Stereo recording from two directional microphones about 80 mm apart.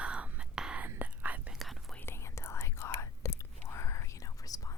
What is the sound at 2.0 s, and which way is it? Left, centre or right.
Whispering, left.